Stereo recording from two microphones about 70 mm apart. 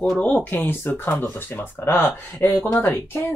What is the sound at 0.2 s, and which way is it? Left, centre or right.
Speech, left.